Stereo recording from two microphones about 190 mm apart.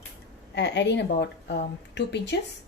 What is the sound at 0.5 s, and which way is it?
Speech, 65° left (ahead or behind).